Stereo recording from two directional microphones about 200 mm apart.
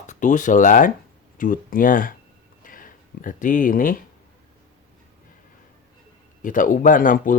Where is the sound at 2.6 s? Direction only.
45° left (ahead or behind).